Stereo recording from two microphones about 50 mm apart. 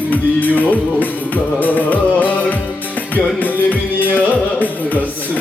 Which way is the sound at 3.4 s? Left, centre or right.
Left.